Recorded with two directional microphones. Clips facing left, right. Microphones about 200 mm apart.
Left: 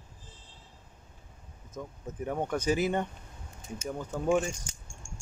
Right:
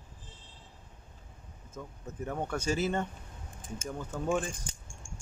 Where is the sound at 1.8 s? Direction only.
15° left (ahead or behind).